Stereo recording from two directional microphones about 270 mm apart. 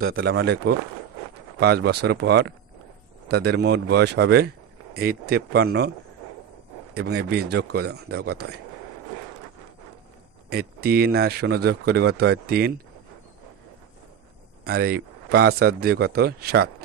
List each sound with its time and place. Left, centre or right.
0.2 s speech: right
6.9 s speech: right
10.5 s speech: right
14.6 s speech: right